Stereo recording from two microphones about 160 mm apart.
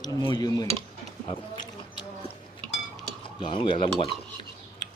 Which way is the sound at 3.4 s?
30° left (ahead or behind).